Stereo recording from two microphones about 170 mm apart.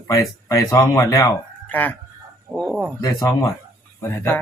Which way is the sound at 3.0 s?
20° left (ahead or behind).